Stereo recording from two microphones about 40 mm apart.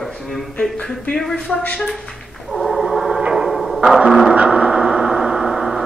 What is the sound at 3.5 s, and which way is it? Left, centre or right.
Music, centre.